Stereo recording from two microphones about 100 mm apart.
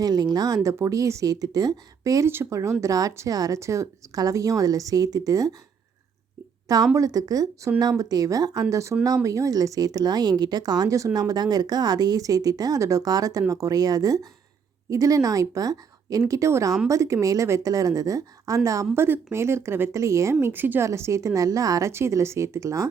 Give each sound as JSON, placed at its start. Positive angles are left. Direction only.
{"t": 0.0, "sound": "a woman's voice", "side_deg": -45}
{"t": 6.9, "sound": "a woman's voice", "side_deg": -35}
{"t": 18.9, "sound": "a woman's voice", "side_deg": -25}
{"t": 20.4, "sound": "a woman's voice", "side_deg": -20}